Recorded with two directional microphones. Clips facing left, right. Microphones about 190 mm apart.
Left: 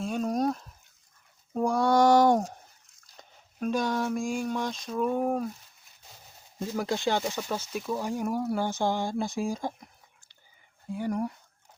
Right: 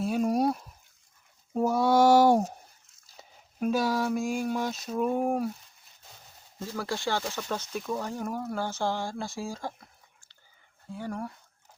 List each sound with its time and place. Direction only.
0.0 s speech: 10° right (ahead or behind)
6.6 s speech: 15° left (ahead or behind)
10.9 s speech: 15° left (ahead or behind)